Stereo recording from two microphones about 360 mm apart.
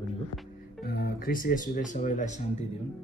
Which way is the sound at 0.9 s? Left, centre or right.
Left.